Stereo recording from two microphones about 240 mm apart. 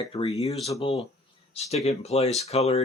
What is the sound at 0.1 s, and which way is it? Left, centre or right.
Speech, left.